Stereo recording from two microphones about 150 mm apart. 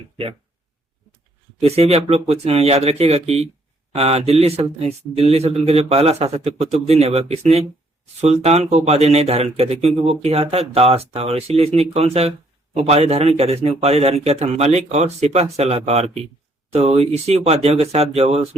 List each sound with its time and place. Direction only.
1.5 s speech: 45° right (ahead or behind)